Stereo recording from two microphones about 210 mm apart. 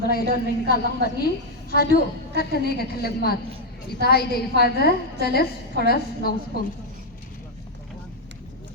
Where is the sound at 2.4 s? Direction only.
45° left (ahead or behind).